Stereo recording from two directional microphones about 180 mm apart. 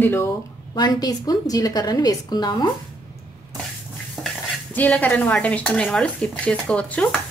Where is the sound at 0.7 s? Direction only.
20° left (ahead or behind).